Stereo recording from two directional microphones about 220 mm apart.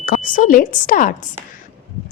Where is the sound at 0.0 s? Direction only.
40° left (ahead or behind).